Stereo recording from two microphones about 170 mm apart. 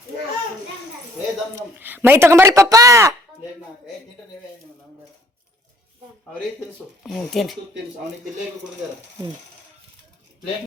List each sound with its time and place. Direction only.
1.5 s speech: 15° right (ahead or behind)
7.0 s speech: centre (ahead or behind)